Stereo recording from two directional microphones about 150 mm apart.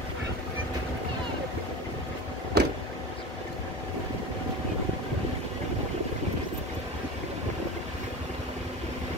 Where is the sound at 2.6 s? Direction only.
90° right.